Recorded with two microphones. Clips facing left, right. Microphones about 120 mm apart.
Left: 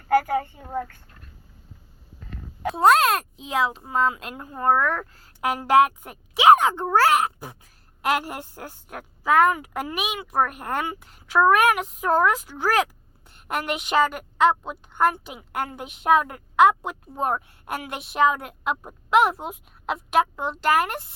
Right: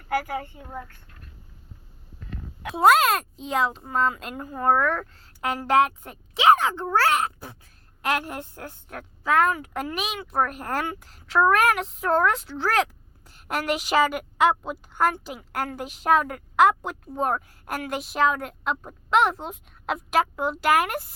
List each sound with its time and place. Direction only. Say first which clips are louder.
2.7 s a woman's voice: even; centre (ahead or behind); by 9.9 s 15° left (ahead or behind)
9.9 s a woman's voice: left 3 dB; 5° left (ahead or behind)